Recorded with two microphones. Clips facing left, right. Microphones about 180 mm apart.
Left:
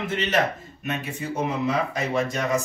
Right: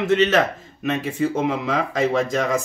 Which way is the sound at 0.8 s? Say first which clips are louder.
Right 8 dB; 90° right.